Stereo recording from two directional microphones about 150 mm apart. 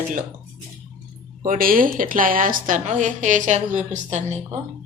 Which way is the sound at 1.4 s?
70° right (ahead or behind).